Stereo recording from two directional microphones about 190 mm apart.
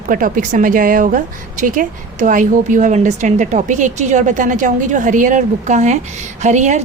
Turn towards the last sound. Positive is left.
turn(degrees=-40)  # may be behind; listen again after turning